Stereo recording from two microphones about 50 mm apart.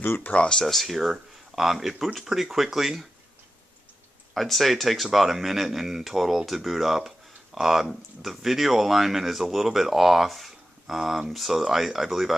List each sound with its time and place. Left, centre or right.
0.0 s speech: left
0.5 s speech: centre
4.3 s speech: centre